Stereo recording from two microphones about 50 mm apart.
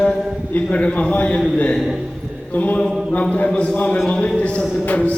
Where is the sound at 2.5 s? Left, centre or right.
Left.